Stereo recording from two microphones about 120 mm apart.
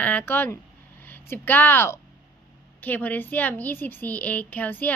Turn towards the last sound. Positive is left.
turn(degrees=15)  # may be behind; listen again after turning